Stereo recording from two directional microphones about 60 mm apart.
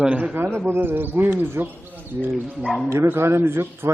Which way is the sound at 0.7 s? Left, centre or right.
Right.